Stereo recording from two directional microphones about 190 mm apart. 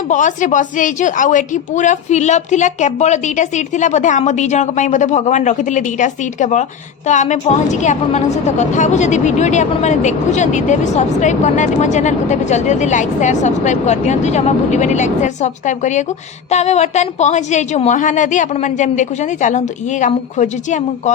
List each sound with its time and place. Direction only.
0.1 s a woman's voice: 40° left (ahead or behind)